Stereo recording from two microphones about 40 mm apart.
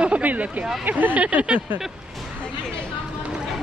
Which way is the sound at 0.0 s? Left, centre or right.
Right.